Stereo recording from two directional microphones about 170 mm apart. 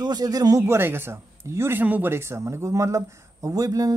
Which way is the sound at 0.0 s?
20° right (ahead or behind).